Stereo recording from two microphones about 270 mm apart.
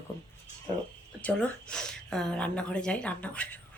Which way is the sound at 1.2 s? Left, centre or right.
Centre.